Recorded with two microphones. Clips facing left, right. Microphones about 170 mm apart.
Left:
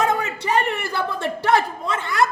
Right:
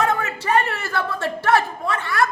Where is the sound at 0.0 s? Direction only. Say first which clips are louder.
Even; 20° left (ahead or behind).